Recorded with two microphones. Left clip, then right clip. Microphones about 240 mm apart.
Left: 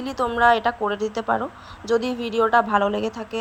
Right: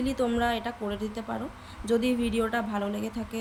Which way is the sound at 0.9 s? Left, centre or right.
Centre.